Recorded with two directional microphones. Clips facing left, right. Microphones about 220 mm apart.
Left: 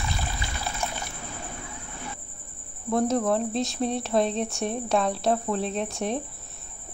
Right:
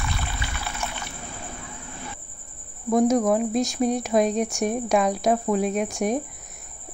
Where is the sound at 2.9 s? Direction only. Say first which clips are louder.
Right 4 dB; 15° right (ahead or behind).